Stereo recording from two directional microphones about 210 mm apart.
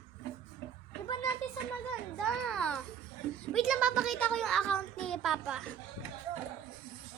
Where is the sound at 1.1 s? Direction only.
15° left (ahead or behind).